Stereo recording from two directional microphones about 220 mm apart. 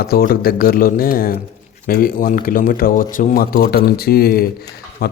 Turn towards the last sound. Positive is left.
turn(degrees=45)  # may be behind; listen again after turning